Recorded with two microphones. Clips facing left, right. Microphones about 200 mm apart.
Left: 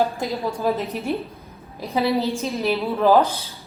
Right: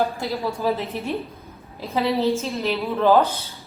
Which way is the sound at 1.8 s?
15° left (ahead or behind).